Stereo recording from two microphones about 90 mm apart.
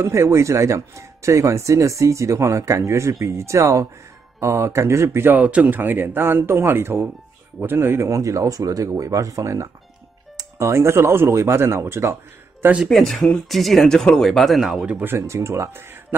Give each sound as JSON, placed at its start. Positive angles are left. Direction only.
{"t": 0.0, "sound": "speech", "side_deg": -35}
{"t": 12.7, "sound": "speech", "side_deg": 0}
{"t": 15.0, "sound": "speech", "side_deg": -25}